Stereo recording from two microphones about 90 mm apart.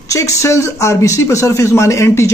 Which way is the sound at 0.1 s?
35° left (ahead or behind).